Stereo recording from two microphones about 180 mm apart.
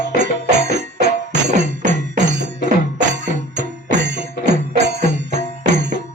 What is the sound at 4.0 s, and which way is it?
Music, 75° right (ahead or behind).